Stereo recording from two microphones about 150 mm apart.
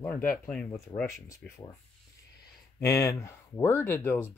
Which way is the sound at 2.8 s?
20° left (ahead or behind).